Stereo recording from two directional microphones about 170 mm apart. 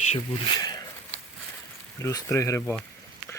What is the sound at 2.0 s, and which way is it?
Speech, 15° left (ahead or behind).